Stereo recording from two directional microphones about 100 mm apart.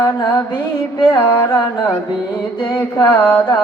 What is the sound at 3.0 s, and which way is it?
Carnatic music, 20° left (ahead or behind).